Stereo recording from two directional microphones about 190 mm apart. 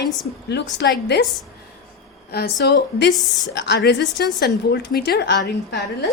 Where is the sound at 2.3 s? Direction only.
60° left (ahead or behind).